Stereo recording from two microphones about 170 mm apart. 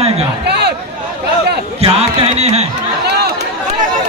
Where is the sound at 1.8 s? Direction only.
35° right (ahead or behind).